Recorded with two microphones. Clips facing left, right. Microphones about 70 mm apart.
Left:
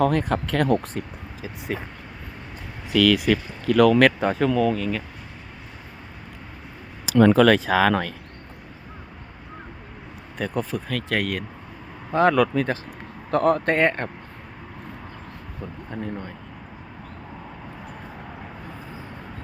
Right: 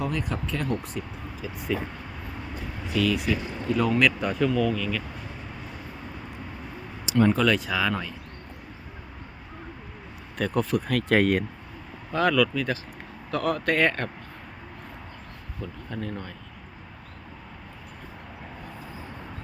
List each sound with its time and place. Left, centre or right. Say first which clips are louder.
0.0 s speech: left 8 dB; left
0.5 s speech: left 8 dB; left
1.7 s speech: right 2 dB; left
2.9 s speech: left 6 dB; left
3.7 s speech: left 8 dB; left
4.0 s speech: left 5 dB; left
7.1 s speech: left 6 dB; left
7.7 s speech: left 7 dB; left
10.3 s speech: right 2 dB; centre
11.2 s speech: right 5 dB; right
12.1 s speech: left 4 dB; left
15.9 s speech: left 3 dB; centre